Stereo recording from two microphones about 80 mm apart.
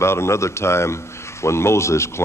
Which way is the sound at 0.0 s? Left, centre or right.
Left.